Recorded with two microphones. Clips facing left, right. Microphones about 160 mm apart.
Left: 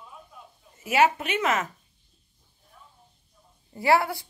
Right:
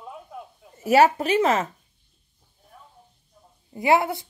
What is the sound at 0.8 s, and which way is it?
Speech, 40° right (ahead or behind).